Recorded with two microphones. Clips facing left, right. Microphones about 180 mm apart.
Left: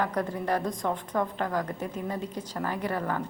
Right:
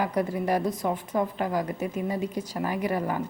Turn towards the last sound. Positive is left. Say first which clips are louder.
# right 3 dB
turn(degrees=-10)  # may be behind; listen again after turning